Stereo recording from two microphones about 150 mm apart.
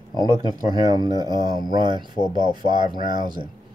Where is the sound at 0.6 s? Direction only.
25° right (ahead or behind).